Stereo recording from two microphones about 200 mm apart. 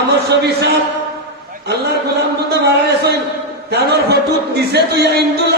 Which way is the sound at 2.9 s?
50° right (ahead or behind).